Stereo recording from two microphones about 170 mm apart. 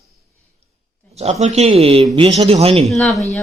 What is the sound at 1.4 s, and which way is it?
A man's voice, 40° right (ahead or behind).